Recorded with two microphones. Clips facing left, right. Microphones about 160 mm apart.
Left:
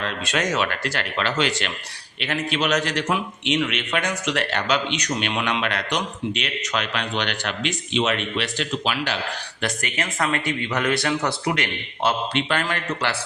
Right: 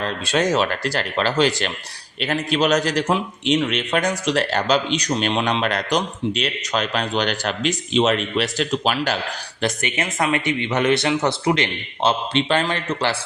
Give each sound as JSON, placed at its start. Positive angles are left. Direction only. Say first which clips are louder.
{"t": 0.0, "sound": "a man's voice", "louder": "right 4 dB", "side_deg": -30}
{"t": 9.6, "sound": "speech", "louder": "right 5 dB", "side_deg": -25}